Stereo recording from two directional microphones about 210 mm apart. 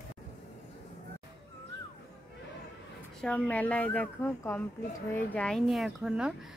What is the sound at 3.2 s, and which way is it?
A woman's voice, 5° left (ahead or behind).